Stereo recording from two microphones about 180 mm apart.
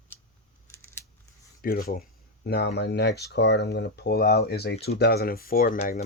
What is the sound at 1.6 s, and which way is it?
Speech, 55° left (ahead or behind).